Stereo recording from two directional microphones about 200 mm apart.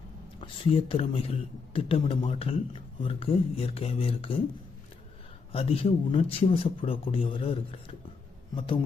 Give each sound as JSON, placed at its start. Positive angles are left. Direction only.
{"t": 0.3, "sound": "a man's voice", "side_deg": 25}
{"t": 5.5, "sound": "a man's voice", "side_deg": 30}